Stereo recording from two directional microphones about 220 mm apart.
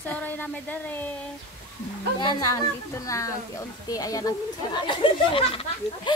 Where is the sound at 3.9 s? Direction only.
15° left (ahead or behind).